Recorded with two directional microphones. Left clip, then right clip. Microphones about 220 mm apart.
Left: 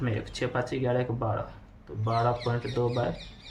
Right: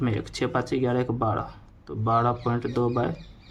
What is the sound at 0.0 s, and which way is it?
Speech, 35° right (ahead or behind).